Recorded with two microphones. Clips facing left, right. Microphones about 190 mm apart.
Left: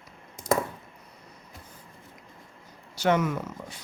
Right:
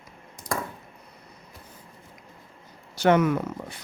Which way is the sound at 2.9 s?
55° right (ahead or behind).